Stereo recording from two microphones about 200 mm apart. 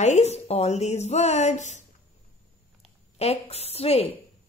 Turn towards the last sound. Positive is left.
turn(degrees=30)  # may be behind; listen again after turning